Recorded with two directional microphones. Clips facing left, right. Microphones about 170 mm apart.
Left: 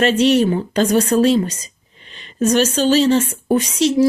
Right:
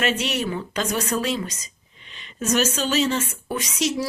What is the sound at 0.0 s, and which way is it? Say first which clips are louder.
Speech: left 10 dB; 35° left (ahead or behind).